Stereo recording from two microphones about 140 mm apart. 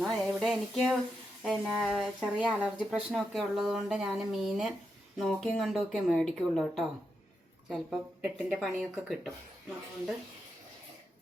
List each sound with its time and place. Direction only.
0.0 s a sound: centre (ahead or behind)
1.4 s speech: centre (ahead or behind)
7.7 s speech: 5° right (ahead or behind)